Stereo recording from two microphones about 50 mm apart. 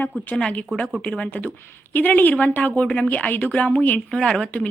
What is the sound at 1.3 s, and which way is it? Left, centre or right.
Speech, left.